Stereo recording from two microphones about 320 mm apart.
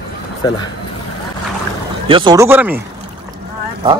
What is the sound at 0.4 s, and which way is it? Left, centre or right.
Speech, centre.